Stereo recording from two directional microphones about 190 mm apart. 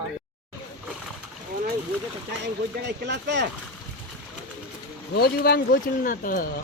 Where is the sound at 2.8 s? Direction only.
65° right (ahead or behind).